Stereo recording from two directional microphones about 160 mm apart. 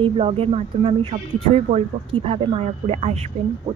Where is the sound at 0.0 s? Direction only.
35° right (ahead or behind).